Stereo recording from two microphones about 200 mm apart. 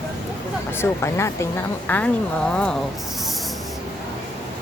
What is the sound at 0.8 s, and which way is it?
Speech, 15° left (ahead or behind).